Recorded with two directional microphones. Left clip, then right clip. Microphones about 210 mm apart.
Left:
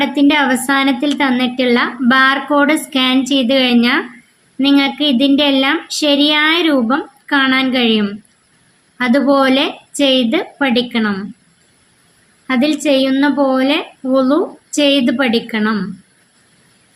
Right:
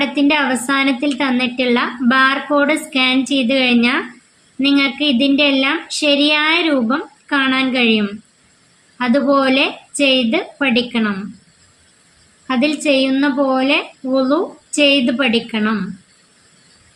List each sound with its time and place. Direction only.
0.0 s a woman's voice: 20° left (ahead or behind)
12.5 s a woman's voice: 15° left (ahead or behind)